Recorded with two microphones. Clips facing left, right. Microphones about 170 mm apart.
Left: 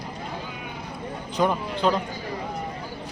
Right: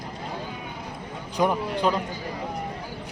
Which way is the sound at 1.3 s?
15° right (ahead or behind).